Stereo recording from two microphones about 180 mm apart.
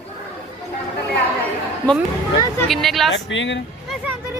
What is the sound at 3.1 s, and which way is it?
Speech, 90° left.